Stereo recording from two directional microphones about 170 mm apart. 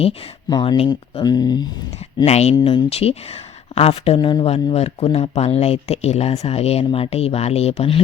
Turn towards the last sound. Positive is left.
turn(degrees=35)  # may be behind; listen again after turning